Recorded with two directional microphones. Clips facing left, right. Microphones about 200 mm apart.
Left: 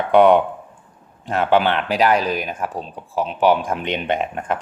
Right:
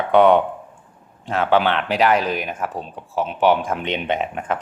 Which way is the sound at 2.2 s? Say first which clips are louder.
Left 1 dB; 40° left (ahead or behind).